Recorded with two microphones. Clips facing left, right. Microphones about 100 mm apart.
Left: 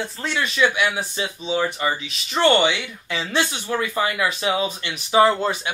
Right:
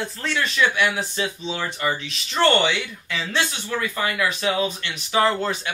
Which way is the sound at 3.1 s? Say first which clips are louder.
Left 3 dB; 20° left (ahead or behind).